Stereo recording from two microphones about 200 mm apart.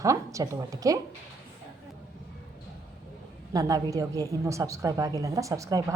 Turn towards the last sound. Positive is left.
turn(degrees=-15)  # may be behind; listen again after turning